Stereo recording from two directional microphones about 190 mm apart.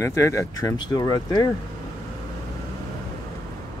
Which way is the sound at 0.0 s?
15° left (ahead or behind).